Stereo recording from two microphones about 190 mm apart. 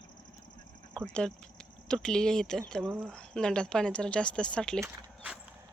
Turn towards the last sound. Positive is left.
turn(degrees=5)  # may be behind; listen again after turning